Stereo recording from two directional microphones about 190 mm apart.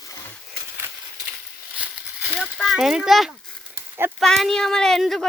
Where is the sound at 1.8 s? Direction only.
5° right (ahead or behind).